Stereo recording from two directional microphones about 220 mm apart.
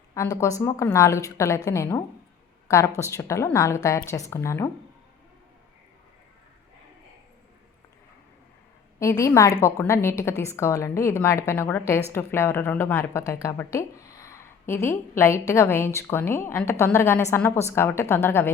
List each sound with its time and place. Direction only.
0.1 s a woman's voice: 15° left (ahead or behind)
9.0 s speech: 15° left (ahead or behind)